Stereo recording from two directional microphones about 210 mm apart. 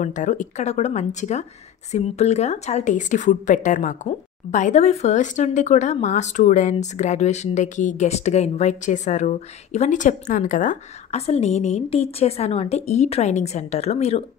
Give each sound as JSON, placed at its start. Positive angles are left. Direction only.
{"t": 0.0, "sound": "speech", "side_deg": 35}